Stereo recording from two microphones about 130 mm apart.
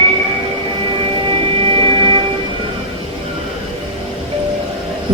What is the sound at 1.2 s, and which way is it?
Music, 45° right (ahead or behind).